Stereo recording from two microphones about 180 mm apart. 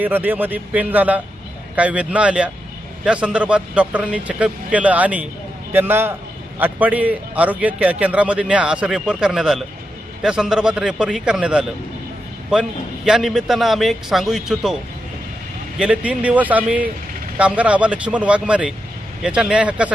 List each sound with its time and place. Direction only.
0.0 s a man's voice: 10° right (ahead or behind)
13.1 s a man's voice: centre (ahead or behind)
15.8 s a man's voice: 5° right (ahead or behind)